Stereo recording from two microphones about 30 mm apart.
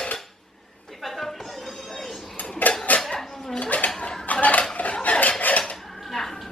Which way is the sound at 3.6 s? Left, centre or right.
Left.